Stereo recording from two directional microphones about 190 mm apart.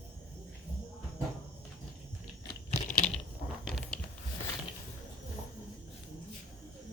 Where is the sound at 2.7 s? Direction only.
40° left (ahead or behind).